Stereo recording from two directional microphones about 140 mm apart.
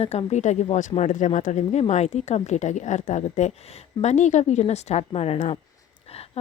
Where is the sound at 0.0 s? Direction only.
50° left (ahead or behind).